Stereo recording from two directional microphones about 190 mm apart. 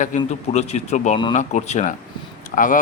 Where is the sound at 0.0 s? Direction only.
40° left (ahead or behind).